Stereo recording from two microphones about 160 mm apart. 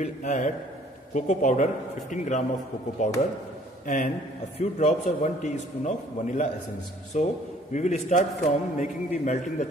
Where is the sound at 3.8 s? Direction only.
55° left (ahead or behind).